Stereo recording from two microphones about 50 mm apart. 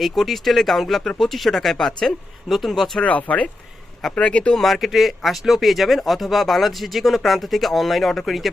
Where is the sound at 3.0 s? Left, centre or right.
Left.